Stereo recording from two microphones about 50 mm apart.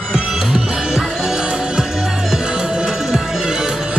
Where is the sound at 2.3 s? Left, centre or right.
Centre.